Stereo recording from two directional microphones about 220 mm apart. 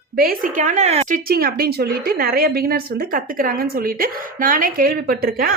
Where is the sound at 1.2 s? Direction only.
40° right (ahead or behind).